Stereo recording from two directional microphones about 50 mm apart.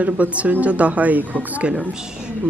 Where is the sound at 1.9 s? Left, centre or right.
Centre.